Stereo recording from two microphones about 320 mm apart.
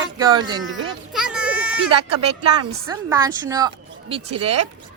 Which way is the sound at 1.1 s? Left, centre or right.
Centre.